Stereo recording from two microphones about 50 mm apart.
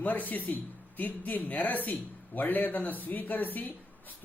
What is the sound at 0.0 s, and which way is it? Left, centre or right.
A man's voice, left.